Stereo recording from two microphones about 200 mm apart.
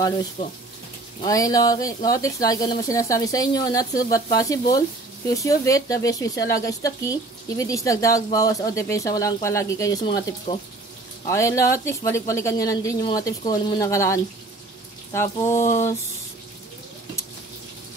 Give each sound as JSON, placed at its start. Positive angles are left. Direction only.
{"t": 1.2, "sound": "speech", "side_deg": 15}